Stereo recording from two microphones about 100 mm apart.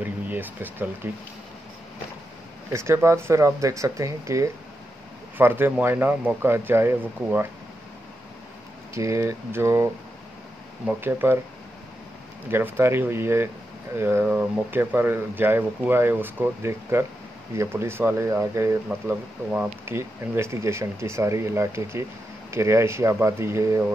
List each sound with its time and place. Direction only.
0.0 s a sound: 20° right (ahead or behind)
1.0 s speech: 20° right (ahead or behind)
2.7 s speech: 25° right (ahead or behind)
5.4 s speech: 20° right (ahead or behind)
8.9 s speech: 30° right (ahead or behind)
10.9 s speech: 20° right (ahead or behind)
12.4 s speech: 25° right (ahead or behind)
18.9 s speech: 15° right (ahead or behind)